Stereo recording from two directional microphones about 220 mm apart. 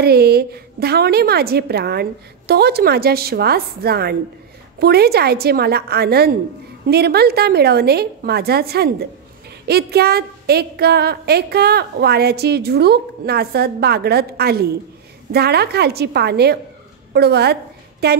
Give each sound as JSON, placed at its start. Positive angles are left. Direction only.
{"t": 0.0, "sound": "a woman's voice", "side_deg": -45}